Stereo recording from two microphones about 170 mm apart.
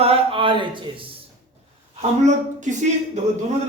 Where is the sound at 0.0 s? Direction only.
35° right (ahead or behind).